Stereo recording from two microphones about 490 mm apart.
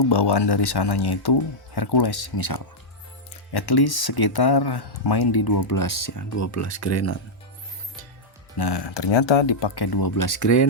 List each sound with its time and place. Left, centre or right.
0.0 s speech: left
8.5 s speech: left